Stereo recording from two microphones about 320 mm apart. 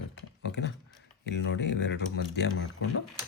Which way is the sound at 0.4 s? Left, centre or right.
Left.